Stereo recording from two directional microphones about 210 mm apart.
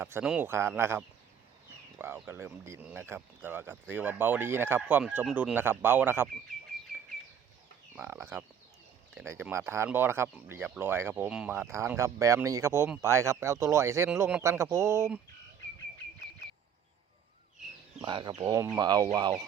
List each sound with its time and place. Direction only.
0.0 s speech: 5° right (ahead or behind)
7.9 s speech: 10° right (ahead or behind)
18.0 s speech: 20° right (ahead or behind)